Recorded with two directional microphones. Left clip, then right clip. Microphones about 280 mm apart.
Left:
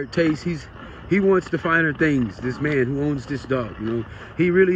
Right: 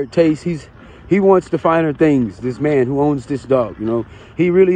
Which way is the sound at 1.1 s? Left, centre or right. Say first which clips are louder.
Right 6 dB; centre.